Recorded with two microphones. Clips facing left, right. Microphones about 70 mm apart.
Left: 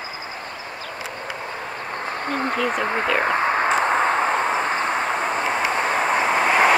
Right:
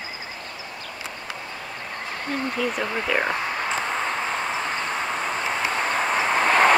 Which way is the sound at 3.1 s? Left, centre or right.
Left.